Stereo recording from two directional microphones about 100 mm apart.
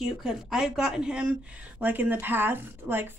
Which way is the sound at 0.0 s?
5° right (ahead or behind).